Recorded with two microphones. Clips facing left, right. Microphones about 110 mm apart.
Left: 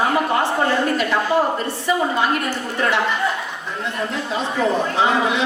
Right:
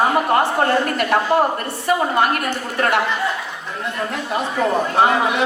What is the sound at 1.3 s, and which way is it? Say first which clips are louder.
Speech: right 2 dB; 55° right (ahead or behind).